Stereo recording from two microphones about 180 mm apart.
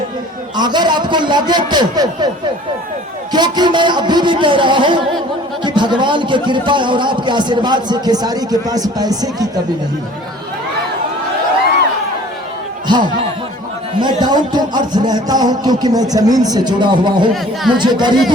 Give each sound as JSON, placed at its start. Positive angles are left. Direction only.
{"t": 0.5, "sound": "a man's voice", "side_deg": -25}
{"t": 3.3, "sound": "a man's voice", "side_deg": -25}
{"t": 14.0, "sound": "a man's voice", "side_deg": -25}